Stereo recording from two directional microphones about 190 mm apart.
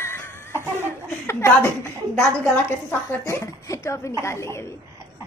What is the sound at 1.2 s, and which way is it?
A woman's voice, 15° left (ahead or behind).